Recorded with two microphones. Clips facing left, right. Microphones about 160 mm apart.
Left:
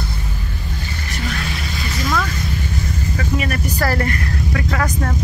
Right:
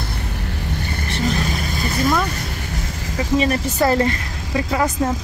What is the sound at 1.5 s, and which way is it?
Vehicle, 45° right (ahead or behind).